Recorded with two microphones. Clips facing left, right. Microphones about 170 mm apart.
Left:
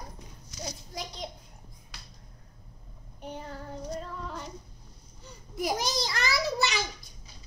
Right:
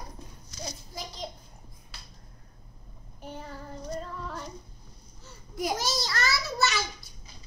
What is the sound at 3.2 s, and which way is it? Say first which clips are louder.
Child singing: left 1 dB; centre (ahead or behind).